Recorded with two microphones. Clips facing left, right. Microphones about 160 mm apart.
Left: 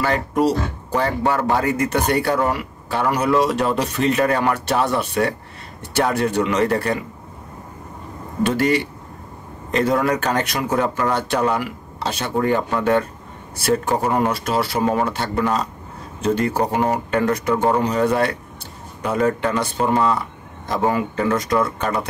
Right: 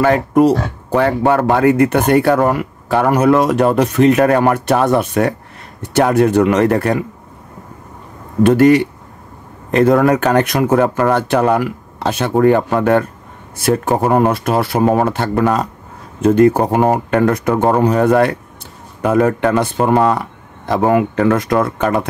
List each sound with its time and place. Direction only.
0.0 s speech: 50° right (ahead or behind)
8.5 s speech: 50° right (ahead or behind)